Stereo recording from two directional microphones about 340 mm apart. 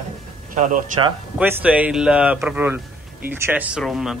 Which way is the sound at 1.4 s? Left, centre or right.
Centre.